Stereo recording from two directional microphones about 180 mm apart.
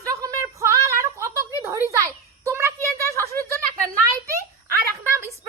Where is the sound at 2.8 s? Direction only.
15° left (ahead or behind).